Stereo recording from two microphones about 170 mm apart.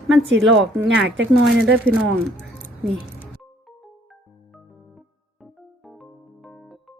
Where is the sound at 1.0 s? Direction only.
90° right.